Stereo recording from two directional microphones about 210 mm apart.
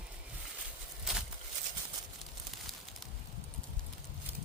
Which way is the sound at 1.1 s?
Centre (ahead or behind).